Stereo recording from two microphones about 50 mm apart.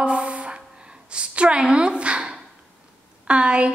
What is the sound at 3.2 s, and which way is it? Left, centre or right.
Speech, right.